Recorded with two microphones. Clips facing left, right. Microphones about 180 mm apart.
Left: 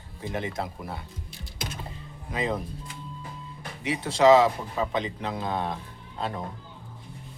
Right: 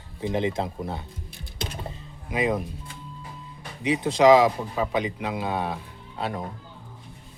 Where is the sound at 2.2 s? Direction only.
10° right (ahead or behind).